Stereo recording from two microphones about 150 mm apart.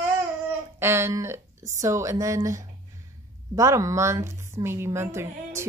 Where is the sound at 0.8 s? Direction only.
15° right (ahead or behind).